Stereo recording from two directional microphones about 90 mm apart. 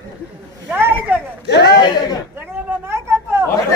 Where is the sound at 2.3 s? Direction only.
30° right (ahead or behind).